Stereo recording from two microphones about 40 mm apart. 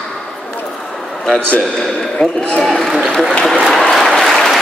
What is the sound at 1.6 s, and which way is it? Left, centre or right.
Speech, centre.